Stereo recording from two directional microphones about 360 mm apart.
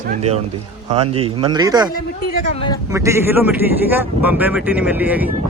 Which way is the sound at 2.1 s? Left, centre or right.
Centre.